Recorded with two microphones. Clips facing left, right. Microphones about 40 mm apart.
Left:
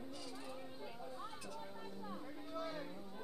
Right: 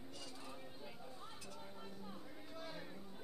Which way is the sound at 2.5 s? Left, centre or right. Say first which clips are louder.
Left 6 dB; centre.